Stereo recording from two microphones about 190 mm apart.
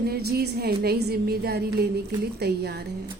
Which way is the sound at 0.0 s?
55° right (ahead or behind).